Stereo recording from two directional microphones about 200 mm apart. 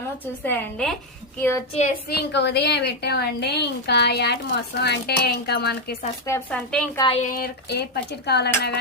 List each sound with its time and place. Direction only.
0.4 s a woman's voice: 5° left (ahead or behind)
1.7 s a woman's voice: 40° left (ahead or behind)
2.0 s a woman's voice: 55° left (ahead or behind)
6.2 s speech: 10° left (ahead or behind)
6.9 s a woman's voice: 25° left (ahead or behind)
7.2 s a woman's voice: 45° left (ahead or behind)